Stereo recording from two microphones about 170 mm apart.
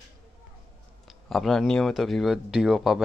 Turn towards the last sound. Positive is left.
turn(degrees=0)  # may be behind; listen again after turning